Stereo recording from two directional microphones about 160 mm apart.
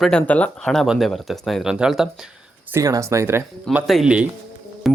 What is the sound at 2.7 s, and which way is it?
Speech, 20° right (ahead or behind).